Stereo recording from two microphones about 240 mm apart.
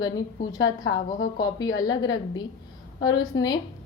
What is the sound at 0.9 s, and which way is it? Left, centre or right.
A woman's voice, centre.